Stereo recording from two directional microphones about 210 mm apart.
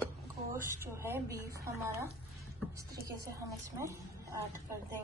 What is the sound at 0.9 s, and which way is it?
A woman's voice, 10° right (ahead or behind).